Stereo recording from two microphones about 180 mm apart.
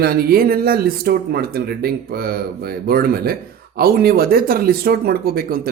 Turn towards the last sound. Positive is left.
turn(degrees=-55)  # may be behind; listen again after turning